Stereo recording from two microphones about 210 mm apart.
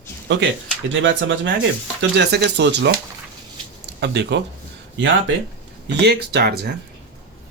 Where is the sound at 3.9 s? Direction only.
55° right (ahead or behind).